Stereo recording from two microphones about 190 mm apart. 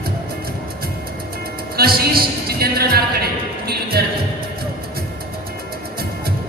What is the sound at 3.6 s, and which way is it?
Music, 55° right (ahead or behind).